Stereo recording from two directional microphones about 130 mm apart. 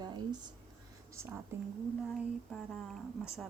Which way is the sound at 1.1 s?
20° right (ahead or behind).